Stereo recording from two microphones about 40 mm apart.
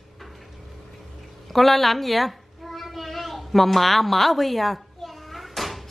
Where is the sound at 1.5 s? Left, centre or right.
Centre.